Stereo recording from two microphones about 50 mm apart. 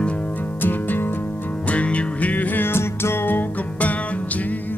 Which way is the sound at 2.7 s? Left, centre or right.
Left.